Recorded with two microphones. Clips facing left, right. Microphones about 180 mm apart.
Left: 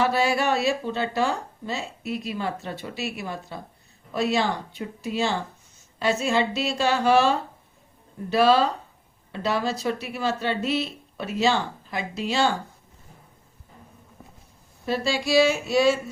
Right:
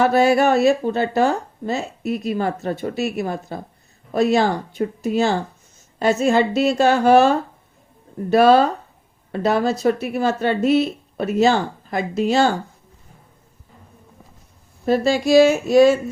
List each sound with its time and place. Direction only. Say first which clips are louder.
0.0 s speech: right 7 dB; 50° right (ahead or behind)
14.8 s speech: right 8 dB; 45° right (ahead or behind)